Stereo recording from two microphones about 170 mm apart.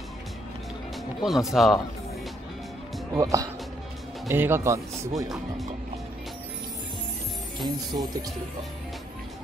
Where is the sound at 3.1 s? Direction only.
20° right (ahead or behind).